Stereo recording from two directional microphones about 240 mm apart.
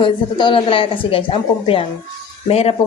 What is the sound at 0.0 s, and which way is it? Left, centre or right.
Speech, left.